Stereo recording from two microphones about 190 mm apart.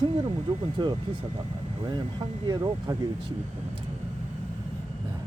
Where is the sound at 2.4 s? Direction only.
20° right (ahead or behind).